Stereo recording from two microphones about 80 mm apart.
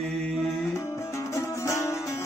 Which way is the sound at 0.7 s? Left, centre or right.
Left.